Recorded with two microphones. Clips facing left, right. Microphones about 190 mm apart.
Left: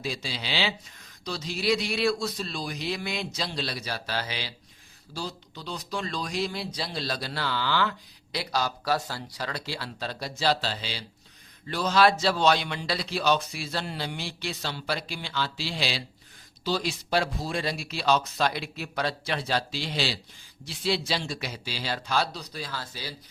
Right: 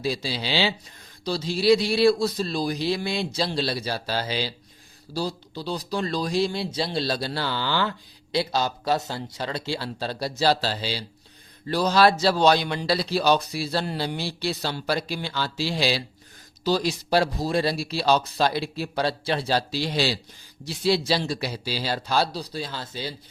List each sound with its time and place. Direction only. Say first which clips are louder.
0.0 s speech: right 6 dB; 35° right (ahead or behind)